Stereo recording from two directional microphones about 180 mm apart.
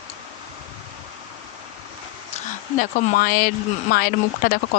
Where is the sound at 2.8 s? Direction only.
50° left (ahead or behind).